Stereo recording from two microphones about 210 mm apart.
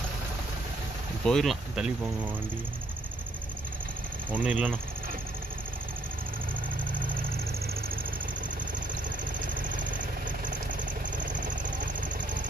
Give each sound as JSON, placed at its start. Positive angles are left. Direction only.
{"t": 1.2, "sound": "speech", "side_deg": 0}
{"t": 4.3, "sound": "speech", "side_deg": -5}
{"t": 6.8, "sound": "vehicle", "side_deg": -40}
{"t": 9.5, "sound": "vehicle", "side_deg": -40}